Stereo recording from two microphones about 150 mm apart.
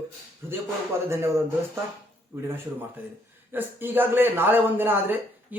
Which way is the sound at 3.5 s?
15° right (ahead or behind).